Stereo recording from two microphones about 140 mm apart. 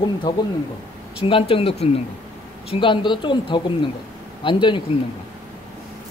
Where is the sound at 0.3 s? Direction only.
30° left (ahead or behind).